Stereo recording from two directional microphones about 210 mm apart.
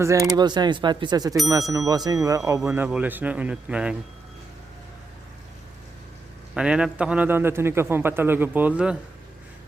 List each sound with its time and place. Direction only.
0.0 s a man's voice: 15° right (ahead or behind)
6.5 s a man's voice: 5° right (ahead or behind)